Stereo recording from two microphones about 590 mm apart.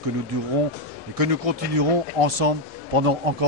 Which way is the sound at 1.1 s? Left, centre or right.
Right.